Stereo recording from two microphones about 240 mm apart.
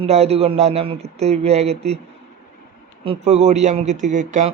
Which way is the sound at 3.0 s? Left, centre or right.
Right.